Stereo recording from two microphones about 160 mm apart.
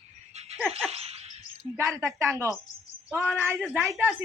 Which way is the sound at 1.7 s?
20° right (ahead or behind).